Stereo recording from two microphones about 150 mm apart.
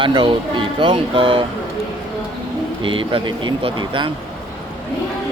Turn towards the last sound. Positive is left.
turn(degrees=-35)  # may be behind; listen again after turning